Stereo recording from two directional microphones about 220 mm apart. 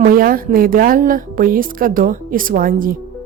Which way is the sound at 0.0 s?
40° right (ahead or behind).